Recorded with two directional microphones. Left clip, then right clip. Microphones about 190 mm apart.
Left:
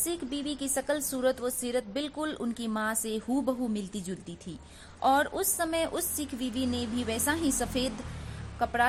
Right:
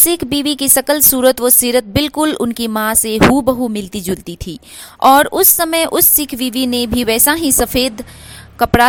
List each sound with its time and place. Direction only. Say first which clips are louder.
0.0 s speech: right 18 dB; 50° right (ahead or behind)